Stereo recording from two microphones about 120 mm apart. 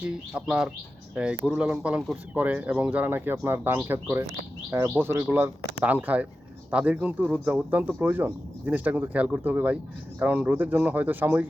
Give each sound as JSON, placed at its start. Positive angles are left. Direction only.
{"t": 0.3, "sound": "speech", "side_deg": -5}